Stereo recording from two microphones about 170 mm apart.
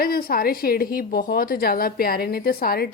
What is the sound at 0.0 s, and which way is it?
A woman's voice, 60° left (ahead or behind).